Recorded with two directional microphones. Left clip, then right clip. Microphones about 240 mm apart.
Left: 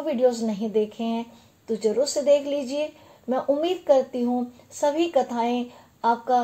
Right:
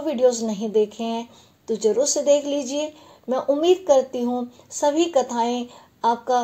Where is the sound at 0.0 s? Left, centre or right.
Right.